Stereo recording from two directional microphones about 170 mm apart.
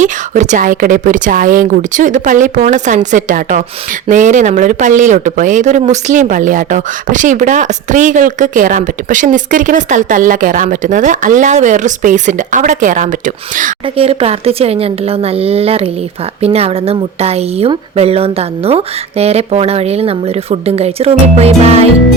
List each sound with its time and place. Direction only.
0.0 s speech: 45° right (ahead or behind)
13.8 s speech: 35° right (ahead or behind)